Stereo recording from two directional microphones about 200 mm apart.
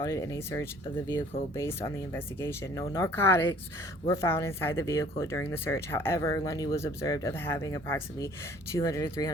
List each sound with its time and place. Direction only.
0.0 s speech: 15° left (ahead or behind)